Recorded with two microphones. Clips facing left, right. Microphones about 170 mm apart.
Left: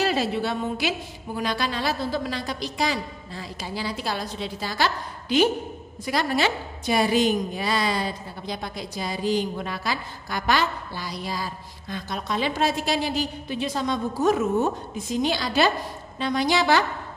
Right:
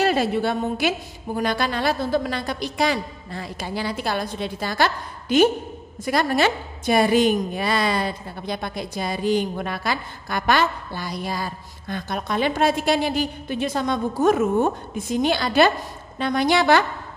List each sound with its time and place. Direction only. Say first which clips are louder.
0.0 s a woman's voice: right 4 dB; 55° right (ahead or behind)